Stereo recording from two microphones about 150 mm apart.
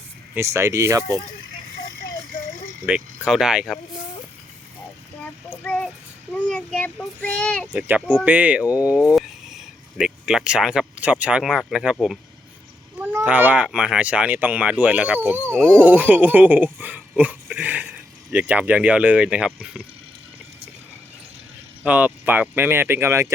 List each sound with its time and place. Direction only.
0.3 s speech: 20° right (ahead or behind)
2.8 s speech: 5° right (ahead or behind)
5.6 s child singing: 5° left (ahead or behind)
6.3 s a child's voice: 5° left (ahead or behind)
7.7 s speech: 10° right (ahead or behind)
13.0 s speech: 10° right (ahead or behind)
16.7 s a sound: 10° right (ahead or behind)
19.5 s speech: 5° right (ahead or behind)
21.8 s speech: 10° right (ahead or behind)